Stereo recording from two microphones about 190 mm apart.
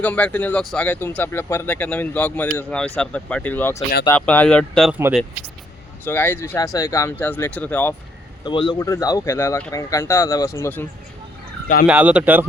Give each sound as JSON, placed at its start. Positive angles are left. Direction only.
{"t": 0.0, "sound": "speech", "side_deg": 5}
{"t": 6.1, "sound": "speech", "side_deg": 10}
{"t": 8.4, "sound": "speech", "side_deg": 25}
{"t": 11.9, "sound": "speech", "side_deg": -5}